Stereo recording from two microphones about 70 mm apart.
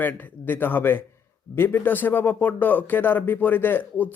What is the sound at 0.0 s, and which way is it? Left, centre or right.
Speech, left.